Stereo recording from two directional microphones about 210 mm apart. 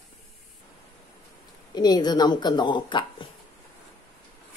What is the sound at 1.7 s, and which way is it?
A woman's voice, 20° left (ahead or behind).